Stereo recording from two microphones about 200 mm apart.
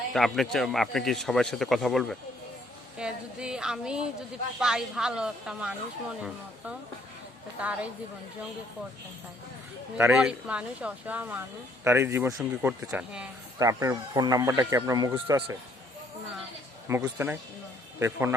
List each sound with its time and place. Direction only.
0.1 s speech: centre (ahead or behind)
7.6 s speech: 5° right (ahead or behind)
10.0 s speech: 5° right (ahead or behind)
13.6 s speech: 15° right (ahead or behind)
16.9 s speech: 10° right (ahead or behind)